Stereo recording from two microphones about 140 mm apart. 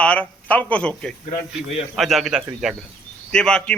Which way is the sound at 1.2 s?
45° left (ahead or behind).